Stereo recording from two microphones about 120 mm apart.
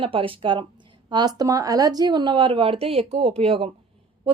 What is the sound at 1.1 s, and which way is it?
A woman's voice, 35° right (ahead or behind).